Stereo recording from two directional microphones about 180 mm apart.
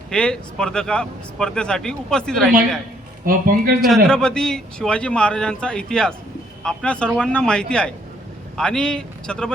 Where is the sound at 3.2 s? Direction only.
50° right (ahead or behind).